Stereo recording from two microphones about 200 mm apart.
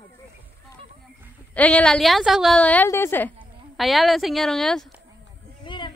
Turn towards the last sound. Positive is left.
turn(degrees=25)  # may be behind; listen again after turning